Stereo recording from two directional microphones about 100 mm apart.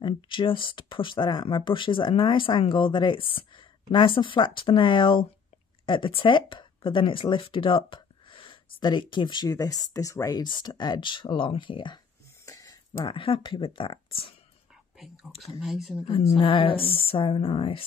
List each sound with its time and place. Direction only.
0.0 s speech: 55° left (ahead or behind)
9.5 s speech: 40° left (ahead or behind)
10.4 s speech: 50° left (ahead or behind)
12.4 s a sound: 35° left (ahead or behind)
13.0 s speech: 60° left (ahead or behind)
15.6 s speech: centre (ahead or behind)
16.1 s speech: 90° left
16.3 s speech: 60° left (ahead or behind)